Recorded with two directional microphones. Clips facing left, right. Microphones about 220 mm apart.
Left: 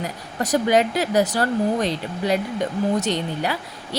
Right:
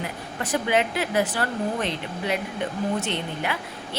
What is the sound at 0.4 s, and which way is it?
A woman's voice, 40° left (ahead or behind).